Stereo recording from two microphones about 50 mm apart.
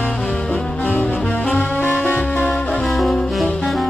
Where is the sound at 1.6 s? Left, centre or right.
Left.